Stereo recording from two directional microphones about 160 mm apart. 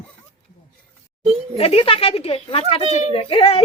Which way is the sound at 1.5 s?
35° left (ahead or behind).